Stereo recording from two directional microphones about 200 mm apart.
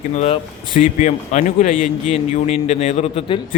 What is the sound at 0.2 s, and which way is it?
Speech, 40° left (ahead or behind).